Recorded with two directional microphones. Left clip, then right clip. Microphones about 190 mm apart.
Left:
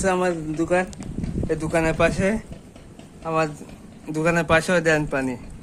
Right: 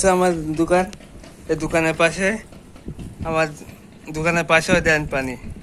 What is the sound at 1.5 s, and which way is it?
A man's voice, centre (ahead or behind).